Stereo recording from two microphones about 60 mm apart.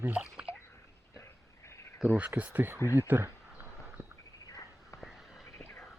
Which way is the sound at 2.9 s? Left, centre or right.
Right.